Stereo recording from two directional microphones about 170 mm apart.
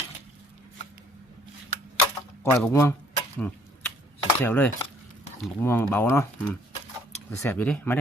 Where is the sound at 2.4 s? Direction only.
15° left (ahead or behind).